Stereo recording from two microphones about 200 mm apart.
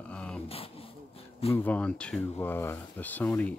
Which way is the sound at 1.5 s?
5° left (ahead or behind).